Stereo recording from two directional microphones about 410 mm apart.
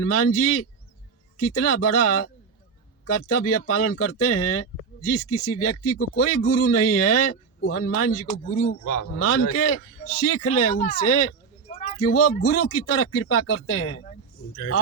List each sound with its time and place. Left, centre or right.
0.0 s speech: left
8.8 s a man's voice: left
9.1 s speech: left
10.7 s speech: centre
11.0 s speech: left
14.5 s a man's voice: left